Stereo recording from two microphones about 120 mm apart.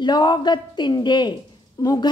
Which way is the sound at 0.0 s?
35° left (ahead or behind).